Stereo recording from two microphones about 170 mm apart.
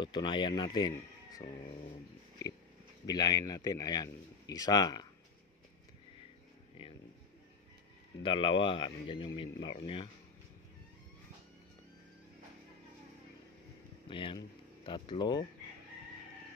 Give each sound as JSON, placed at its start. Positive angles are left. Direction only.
{"t": 0.0, "sound": "a man's voice", "side_deg": 25}
{"t": 2.4, "sound": "a sound", "side_deg": 20}
{"t": 3.1, "sound": "a man's voice", "side_deg": 25}
{"t": 8.2, "sound": "speech", "side_deg": 30}
{"t": 9.6, "sound": "speech", "side_deg": 90}
{"t": 14.0, "sound": "speech", "side_deg": 30}